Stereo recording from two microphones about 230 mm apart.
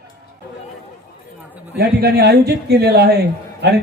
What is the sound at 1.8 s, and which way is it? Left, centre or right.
A man's voice, right.